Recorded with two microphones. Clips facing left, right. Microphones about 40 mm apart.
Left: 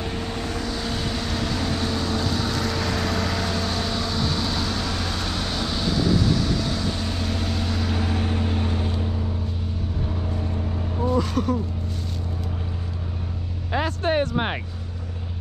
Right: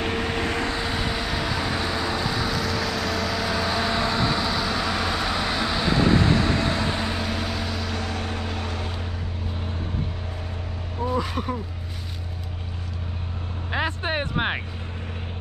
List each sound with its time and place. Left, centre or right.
0.0 s vehicle: right
0.7 s vehicle: centre
5.9 s vehicle: right
7.2 s vehicle: centre
11.1 s a sound: centre
13.7 s vehicle: centre